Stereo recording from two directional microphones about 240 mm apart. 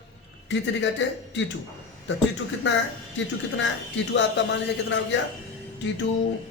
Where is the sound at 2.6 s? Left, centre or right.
Left.